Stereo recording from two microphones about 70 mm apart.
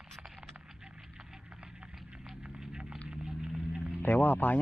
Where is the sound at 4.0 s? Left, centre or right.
Left.